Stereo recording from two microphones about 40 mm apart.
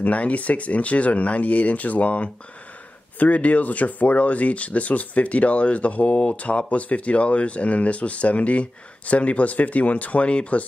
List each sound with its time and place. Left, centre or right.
0.0 s speech: left